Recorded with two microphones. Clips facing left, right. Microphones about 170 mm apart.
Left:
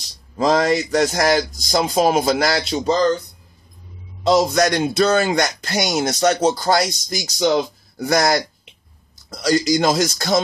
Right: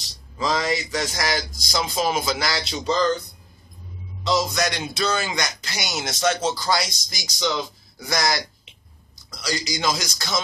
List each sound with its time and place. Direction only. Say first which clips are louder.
0.4 s speech: left 7 dB; 50° left (ahead or behind)
2.7 s speech: left 6 dB; 40° left (ahead or behind)
4.3 s speech: left 7 dB; 55° left (ahead or behind)